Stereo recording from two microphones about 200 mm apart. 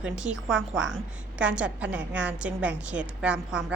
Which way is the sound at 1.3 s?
5° right (ahead or behind).